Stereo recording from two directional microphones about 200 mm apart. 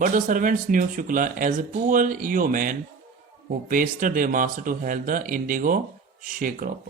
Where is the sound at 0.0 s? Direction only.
40° right (ahead or behind).